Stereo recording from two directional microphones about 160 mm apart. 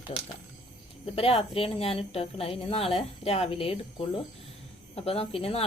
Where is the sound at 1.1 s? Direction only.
35° left (ahead or behind).